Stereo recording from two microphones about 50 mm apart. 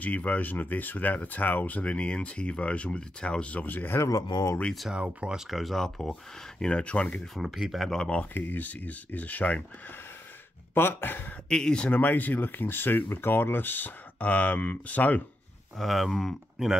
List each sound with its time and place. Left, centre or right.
0.0 s speech: left
3.6 s speech: left
4.9 s speech: centre
5.5 s speech: centre
6.6 s speech: left
7.3 s speech: centre
8.4 s speech: left
10.7 s speech: left
11.4 s speech: centre
11.9 s speech: left
15.8 s speech: centre